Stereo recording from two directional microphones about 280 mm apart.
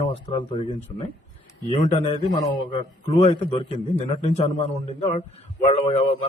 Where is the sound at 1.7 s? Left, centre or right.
Left.